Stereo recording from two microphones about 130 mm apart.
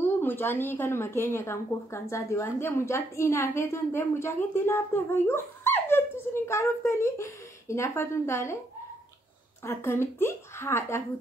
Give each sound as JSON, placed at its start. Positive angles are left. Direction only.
{"t": 0.0, "sound": "a woman's voice", "side_deg": 15}
{"t": 9.7, "sound": "a woman's voice", "side_deg": 20}